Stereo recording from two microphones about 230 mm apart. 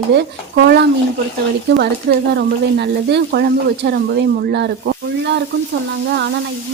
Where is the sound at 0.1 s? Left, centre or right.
Right.